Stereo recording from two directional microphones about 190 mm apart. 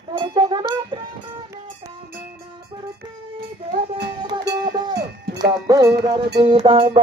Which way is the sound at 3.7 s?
60° right (ahead or behind).